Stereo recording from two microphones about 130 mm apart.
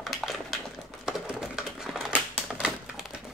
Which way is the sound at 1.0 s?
5° right (ahead or behind).